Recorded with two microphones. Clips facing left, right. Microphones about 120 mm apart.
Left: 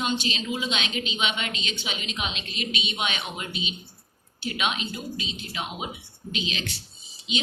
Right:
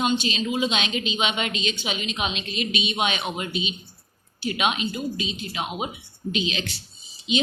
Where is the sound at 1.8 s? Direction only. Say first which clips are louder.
Right 4 dB; 20° right (ahead or behind).